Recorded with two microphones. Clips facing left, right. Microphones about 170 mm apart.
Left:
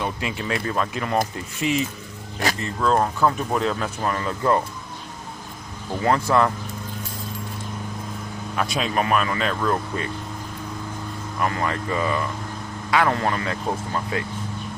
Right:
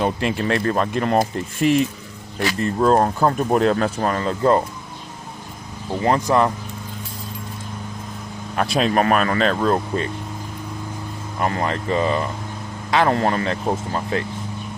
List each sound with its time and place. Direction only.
0.2 s speech: 55° right (ahead or behind)
0.9 s speech: 40° right (ahead or behind)
2.7 s speech: 40° right (ahead or behind)
3.6 s speech: 50° right (ahead or behind)
3.8 s speech: 35° right (ahead or behind)
6.0 s speech: 20° right (ahead or behind)
8.5 s speech: 35° right (ahead or behind)
8.8 s speech: 50° right (ahead or behind)
9.6 s speech: 30° right (ahead or behind)
11.3 s speech: 30° right (ahead or behind)